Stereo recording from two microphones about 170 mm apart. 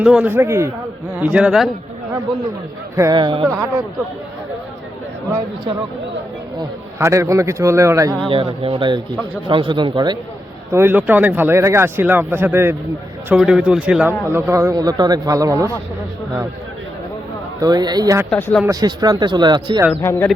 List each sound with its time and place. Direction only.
0.0 s speech: 5° right (ahead or behind)
2.9 s speech: 20° right (ahead or behind)
3.4 s speech: 15° right (ahead or behind)
6.6 s speech: 15° right (ahead or behind)
8.3 s speech: 35° right (ahead or behind)
10.7 s speech: 15° right (ahead or behind)
14.5 s speech: 20° right (ahead or behind)
17.6 s speech: 25° right (ahead or behind)
18.3 s speech: 10° left (ahead or behind)
18.6 s speech: 20° right (ahead or behind)
20.0 s speech: 15° left (ahead or behind)